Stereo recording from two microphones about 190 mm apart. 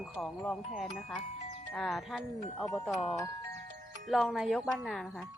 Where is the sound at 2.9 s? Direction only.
Centre (ahead or behind).